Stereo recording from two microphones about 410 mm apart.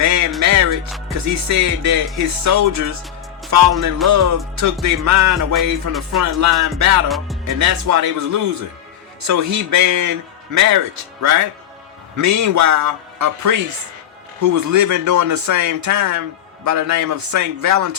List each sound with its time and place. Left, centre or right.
0.0 s music: right
0.9 s music: centre
1.1 s a man's voice: right